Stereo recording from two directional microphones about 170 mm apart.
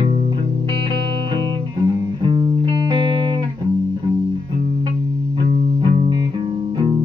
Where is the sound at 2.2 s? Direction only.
25° right (ahead or behind).